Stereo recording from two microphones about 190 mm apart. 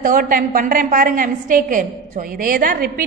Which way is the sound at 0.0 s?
45° right (ahead or behind).